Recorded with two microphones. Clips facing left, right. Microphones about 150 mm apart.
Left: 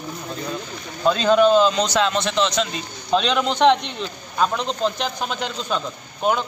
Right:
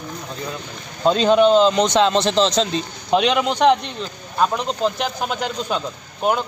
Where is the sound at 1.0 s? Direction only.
20° right (ahead or behind).